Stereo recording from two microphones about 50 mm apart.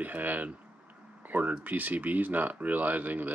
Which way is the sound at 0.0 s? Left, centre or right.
Right.